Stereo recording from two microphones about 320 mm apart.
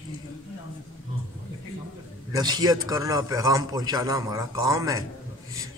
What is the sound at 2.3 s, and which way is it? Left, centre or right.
Speech, centre.